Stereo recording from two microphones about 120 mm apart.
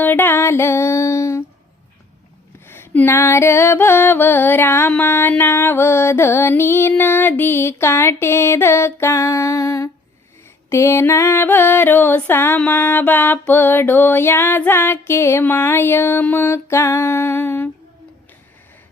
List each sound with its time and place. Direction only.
0.0 s music: 15° left (ahead or behind)
2.6 s music: 20° left (ahead or behind)
10.7 s a sound: 25° left (ahead or behind)